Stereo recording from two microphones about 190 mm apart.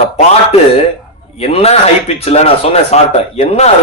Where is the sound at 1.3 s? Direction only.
30° left (ahead or behind).